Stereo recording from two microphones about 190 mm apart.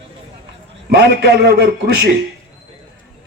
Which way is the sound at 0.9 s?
60° right (ahead or behind).